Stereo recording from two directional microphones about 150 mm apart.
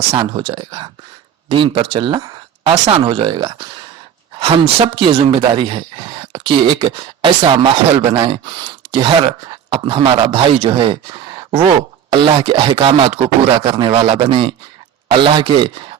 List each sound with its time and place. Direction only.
0.1 s speech: 35° right (ahead or behind)